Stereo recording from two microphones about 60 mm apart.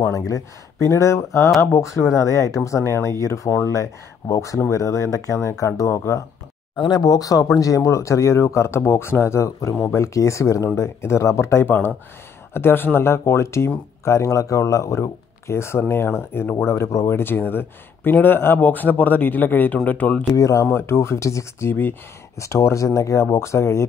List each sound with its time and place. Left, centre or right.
0.1 s speech: left
7.0 s speech: left
7.6 s speech: left
12.5 s speech: left
17.1 s speech: left
20.3 s speech: left
20.7 s speech: left
22.4 s speech: left